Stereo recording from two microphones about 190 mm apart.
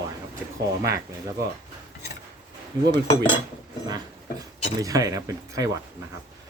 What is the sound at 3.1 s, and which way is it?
Cutlery, 25° left (ahead or behind).